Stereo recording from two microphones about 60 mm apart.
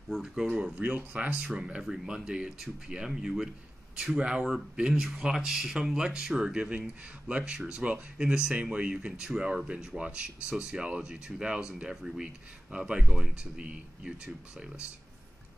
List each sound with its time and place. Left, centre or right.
0.2 s speech: centre
0.7 s speech: right
1.6 s speech: centre